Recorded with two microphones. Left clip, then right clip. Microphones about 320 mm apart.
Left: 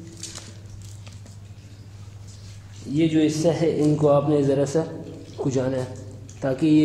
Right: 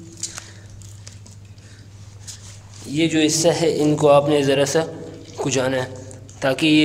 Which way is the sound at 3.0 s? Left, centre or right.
Right.